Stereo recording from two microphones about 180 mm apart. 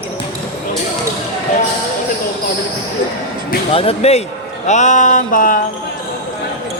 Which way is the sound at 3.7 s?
35° left (ahead or behind).